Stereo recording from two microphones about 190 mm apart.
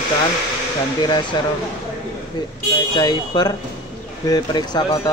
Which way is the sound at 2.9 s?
20° left (ahead or behind).